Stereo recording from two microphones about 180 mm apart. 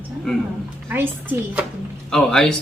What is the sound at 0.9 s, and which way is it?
Speech, 10° right (ahead or behind).